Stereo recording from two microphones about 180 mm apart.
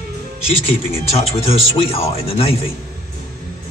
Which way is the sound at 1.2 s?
30° left (ahead or behind).